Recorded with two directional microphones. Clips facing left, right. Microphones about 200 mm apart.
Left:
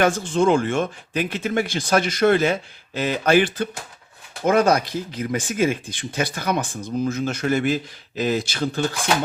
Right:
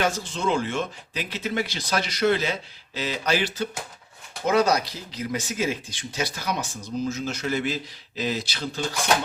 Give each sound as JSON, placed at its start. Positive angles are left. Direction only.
{"t": 0.0, "sound": "speech", "side_deg": 50}